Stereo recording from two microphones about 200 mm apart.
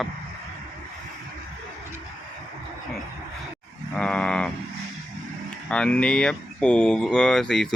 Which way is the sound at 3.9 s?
5° left (ahead or behind).